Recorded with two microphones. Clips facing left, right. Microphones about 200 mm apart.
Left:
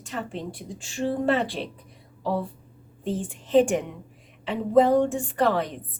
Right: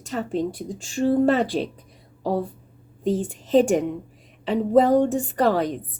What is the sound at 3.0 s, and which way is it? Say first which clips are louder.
A woman's voice: right 6 dB; 40° right (ahead or behind).